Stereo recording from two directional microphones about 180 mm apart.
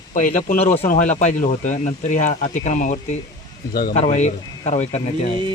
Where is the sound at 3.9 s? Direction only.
40° left (ahead or behind).